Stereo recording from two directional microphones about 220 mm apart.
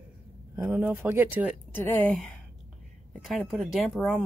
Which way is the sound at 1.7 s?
10° left (ahead or behind).